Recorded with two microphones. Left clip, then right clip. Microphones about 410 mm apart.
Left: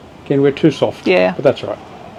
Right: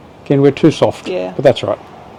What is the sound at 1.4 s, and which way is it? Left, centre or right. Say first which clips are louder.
Speech: right 3 dB; right.